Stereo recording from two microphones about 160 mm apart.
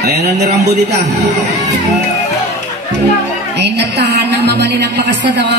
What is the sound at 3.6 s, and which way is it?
A woman's voice, 90° right.